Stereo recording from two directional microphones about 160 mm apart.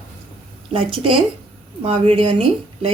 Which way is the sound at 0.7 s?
35° right (ahead or behind).